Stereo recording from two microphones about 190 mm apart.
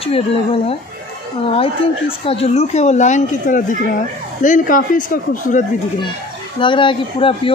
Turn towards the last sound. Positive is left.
turn(degrees=25)  # may be behind; listen again after turning